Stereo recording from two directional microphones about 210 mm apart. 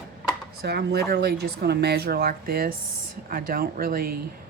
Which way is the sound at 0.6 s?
50° right (ahead or behind).